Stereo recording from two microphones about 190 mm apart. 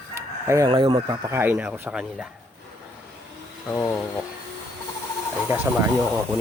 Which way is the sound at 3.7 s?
5° left (ahead or behind).